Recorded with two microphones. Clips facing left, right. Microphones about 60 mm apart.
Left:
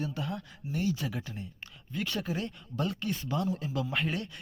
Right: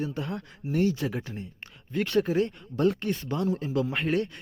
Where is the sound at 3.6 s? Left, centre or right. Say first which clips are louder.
Right 5 dB; right.